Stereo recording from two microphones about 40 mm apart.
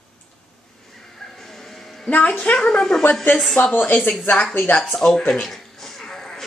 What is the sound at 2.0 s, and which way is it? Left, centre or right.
Speech, left.